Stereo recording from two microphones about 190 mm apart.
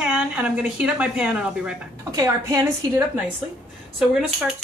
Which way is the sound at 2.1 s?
20° right (ahead or behind).